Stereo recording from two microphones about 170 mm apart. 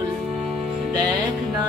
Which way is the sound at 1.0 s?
20° right (ahead or behind).